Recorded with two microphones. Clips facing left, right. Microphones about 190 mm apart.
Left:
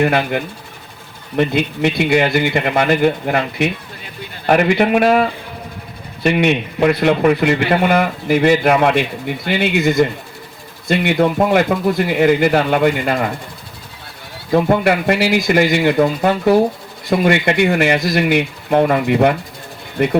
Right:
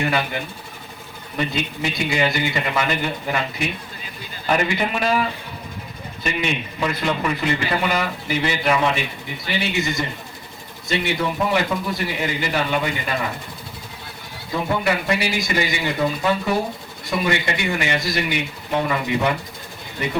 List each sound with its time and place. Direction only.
0.0 s a man's voice: 55° left (ahead or behind)
6.2 s a man's voice: 60° left (ahead or behind)
14.5 s a man's voice: 60° left (ahead or behind)